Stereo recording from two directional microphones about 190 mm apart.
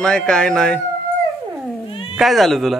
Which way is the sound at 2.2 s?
Centre (ahead or behind).